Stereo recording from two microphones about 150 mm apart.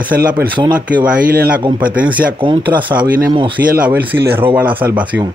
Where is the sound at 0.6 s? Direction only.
30° right (ahead or behind).